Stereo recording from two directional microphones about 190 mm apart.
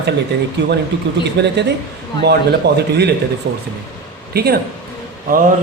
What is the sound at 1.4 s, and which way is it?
Speech, 60° right (ahead or behind).